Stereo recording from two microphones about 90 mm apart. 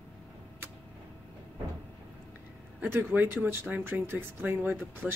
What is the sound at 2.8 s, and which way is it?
Speech, 25° right (ahead or behind).